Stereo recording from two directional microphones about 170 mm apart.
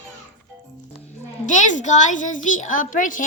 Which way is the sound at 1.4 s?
45° left (ahead or behind).